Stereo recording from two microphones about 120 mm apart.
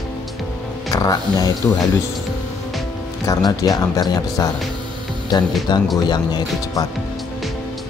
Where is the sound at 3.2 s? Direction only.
30° left (ahead or behind).